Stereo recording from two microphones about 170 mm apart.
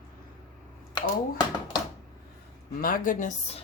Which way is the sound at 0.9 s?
25° left (ahead or behind).